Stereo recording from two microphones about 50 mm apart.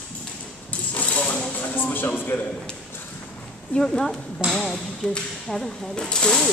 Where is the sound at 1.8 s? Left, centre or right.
Left.